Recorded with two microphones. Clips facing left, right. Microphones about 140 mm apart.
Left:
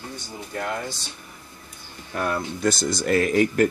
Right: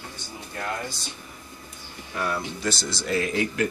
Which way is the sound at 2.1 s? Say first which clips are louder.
Left 3 dB; 50° left (ahead or behind).